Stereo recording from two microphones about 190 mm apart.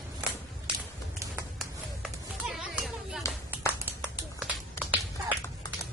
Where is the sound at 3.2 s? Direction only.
15° left (ahead or behind).